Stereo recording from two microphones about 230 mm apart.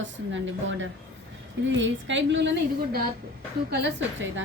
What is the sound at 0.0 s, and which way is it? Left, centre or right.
Speech, right.